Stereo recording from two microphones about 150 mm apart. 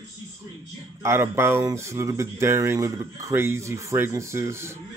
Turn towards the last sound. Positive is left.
turn(degrees=-20)  # may be behind; listen again after turning